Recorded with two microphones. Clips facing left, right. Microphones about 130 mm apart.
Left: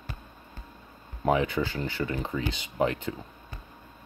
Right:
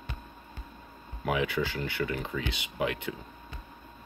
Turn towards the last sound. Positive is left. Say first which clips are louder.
# left 4 dB
turn(degrees=35)  # may be behind; listen again after turning